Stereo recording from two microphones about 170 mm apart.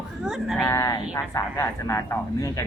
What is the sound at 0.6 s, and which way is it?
Speech, 20° left (ahead or behind).